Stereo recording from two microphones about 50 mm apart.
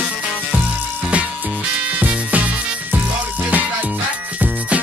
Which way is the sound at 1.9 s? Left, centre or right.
Right.